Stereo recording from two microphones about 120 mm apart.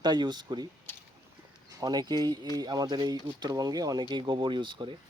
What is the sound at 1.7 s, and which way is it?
Speech, 35° right (ahead or behind).